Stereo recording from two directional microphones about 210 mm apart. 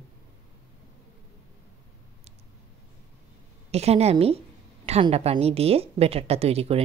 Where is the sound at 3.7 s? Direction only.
30° right (ahead or behind).